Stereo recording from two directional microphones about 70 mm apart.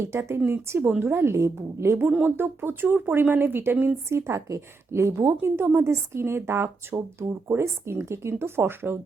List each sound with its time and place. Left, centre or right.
0.0 s speech: right